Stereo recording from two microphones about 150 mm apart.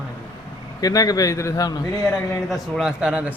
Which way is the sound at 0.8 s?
25° left (ahead or behind).